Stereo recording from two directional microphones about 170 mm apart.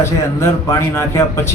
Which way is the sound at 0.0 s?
15° left (ahead or behind).